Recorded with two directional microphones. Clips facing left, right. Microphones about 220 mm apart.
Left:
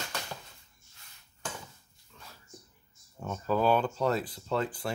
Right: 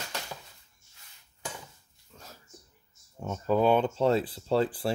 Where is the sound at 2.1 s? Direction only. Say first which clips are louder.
Right 3 dB; 40° right (ahead or behind).